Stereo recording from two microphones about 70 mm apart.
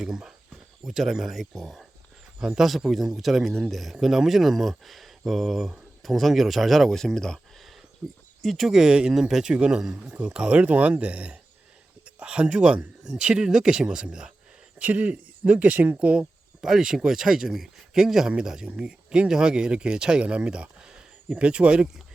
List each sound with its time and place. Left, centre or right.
0.0 s speech: centre
8.0 s speech: centre
8.4 s speech: centre
14.8 s speech: right